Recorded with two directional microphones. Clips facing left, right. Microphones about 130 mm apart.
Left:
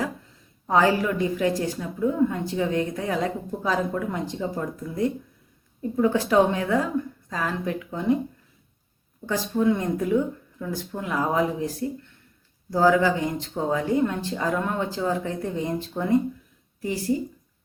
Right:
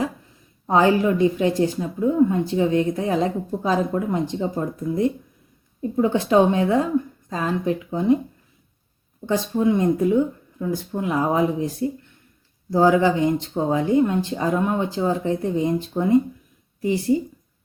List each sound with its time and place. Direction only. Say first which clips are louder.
0.7 s speech: right 3 dB; 25° right (ahead or behind)
9.2 s speech: right 2 dB; 20° right (ahead or behind)